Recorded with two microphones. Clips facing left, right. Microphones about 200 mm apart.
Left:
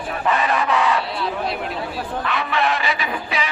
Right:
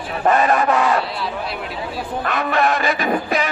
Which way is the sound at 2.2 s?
45° right (ahead or behind).